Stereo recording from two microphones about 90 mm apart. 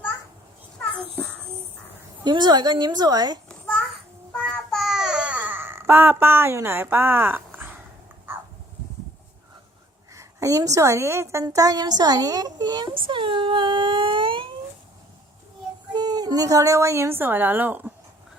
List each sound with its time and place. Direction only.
2.2 s a woman's voice: 55° right (ahead or behind)
3.5 s a sound: 5° left (ahead or behind)
4.4 s babbling: 5° left (ahead or behind); by 7.8 s 20° right (ahead or behind)
10.2 s a woman's voice: 35° right (ahead or behind)
11.4 s a woman's voice: 45° right (ahead or behind)
13.1 s speech: 70° right (ahead or behind)
15.9 s a woman's voice: 50° right (ahead or behind); by 17.9 s 20° right (ahead or behind)